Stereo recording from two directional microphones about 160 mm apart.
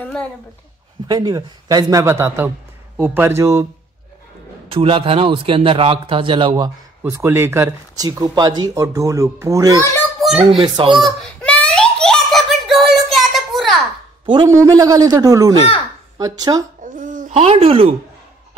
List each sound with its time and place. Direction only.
0.0 s a sound: 10° left (ahead or behind)
1.0 s speech: 25° right (ahead or behind)
4.6 s a man's voice: 35° right (ahead or behind)
7.0 s speech: 15° right (ahead or behind)
10.2 s speech: centre (ahead or behind)
10.6 s a man's voice: 30° right (ahead or behind)
11.1 s a sound: 5° left (ahead or behind)
14.2 s a man's voice: 30° right (ahead or behind)
16.8 s babbling: 50° right (ahead or behind); by 17.9 s 35° right (ahead or behind)